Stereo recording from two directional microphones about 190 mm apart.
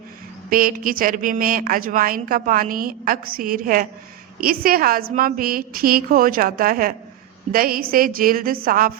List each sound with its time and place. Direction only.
0.5 s a woman's voice: 50° right (ahead or behind)